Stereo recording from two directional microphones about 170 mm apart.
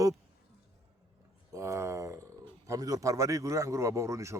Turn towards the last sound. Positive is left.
turn(degrees=-15)  # may be behind; listen again after turning